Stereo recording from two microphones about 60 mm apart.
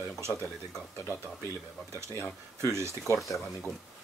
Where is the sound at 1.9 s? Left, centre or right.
Right.